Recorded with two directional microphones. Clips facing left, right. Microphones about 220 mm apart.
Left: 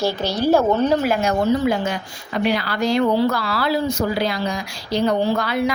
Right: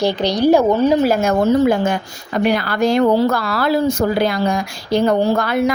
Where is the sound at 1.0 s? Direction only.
45° right (ahead or behind).